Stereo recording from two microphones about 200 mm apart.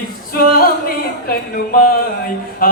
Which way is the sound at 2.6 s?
45° left (ahead or behind).